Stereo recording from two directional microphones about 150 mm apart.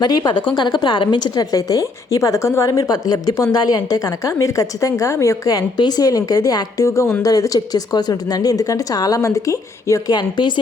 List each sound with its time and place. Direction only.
0.0 s a woman's voice: 30° left (ahead or behind)